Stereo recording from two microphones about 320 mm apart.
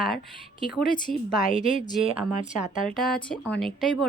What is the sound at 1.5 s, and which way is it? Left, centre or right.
Speech, left.